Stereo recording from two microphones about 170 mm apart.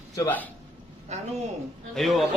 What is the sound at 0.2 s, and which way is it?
Speech, 10° left (ahead or behind).